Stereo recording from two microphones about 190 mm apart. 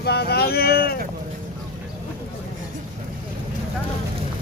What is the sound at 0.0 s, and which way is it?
Speech, 60° left (ahead or behind).